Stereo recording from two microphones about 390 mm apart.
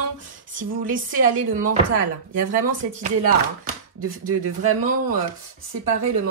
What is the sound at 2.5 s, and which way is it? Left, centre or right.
Speech, centre.